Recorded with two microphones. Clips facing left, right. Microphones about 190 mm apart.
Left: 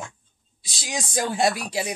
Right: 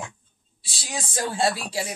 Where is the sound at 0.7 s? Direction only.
15° left (ahead or behind).